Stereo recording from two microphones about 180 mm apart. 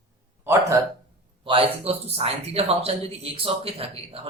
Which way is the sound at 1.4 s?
30° right (ahead or behind).